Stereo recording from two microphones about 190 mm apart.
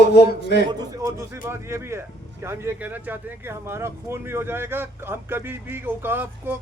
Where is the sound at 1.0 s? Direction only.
15° right (ahead or behind).